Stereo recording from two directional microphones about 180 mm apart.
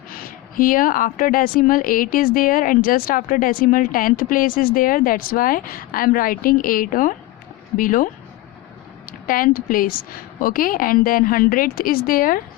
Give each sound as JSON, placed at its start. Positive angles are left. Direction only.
{"t": 0.3, "sound": "a woman's voice", "side_deg": 50}
{"t": 9.2, "sound": "a woman's voice", "side_deg": 50}